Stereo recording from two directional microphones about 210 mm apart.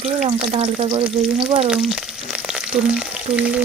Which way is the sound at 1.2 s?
Centre (ahead or behind).